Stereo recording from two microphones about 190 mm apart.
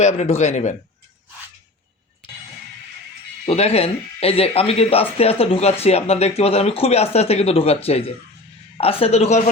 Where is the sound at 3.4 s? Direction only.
30° left (ahead or behind).